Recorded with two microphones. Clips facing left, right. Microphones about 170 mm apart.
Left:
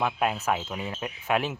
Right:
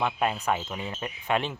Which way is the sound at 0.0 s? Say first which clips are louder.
Even; 5° left (ahead or behind).